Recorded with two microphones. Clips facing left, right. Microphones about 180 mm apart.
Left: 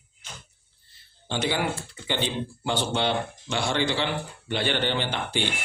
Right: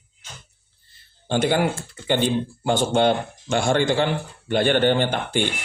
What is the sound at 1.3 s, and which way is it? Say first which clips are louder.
Speech: right 6 dB; 50° right (ahead or behind).